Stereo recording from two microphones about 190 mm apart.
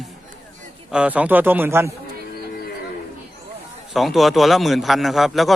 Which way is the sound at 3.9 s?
Centre (ahead or behind).